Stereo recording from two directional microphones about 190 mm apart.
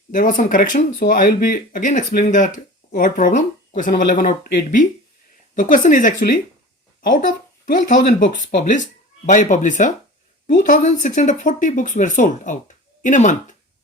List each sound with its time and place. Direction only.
0.1 s speech: 45° left (ahead or behind)
7.6 s speech: 40° left (ahead or behind)